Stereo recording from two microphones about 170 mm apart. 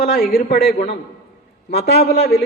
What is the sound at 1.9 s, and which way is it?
Speech, 70° left (ahead or behind).